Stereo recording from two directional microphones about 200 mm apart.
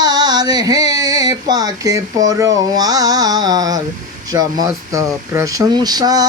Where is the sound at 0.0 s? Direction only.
20° right (ahead or behind).